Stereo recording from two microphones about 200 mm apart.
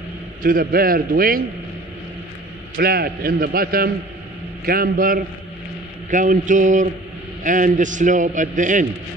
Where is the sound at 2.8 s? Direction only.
50° right (ahead or behind).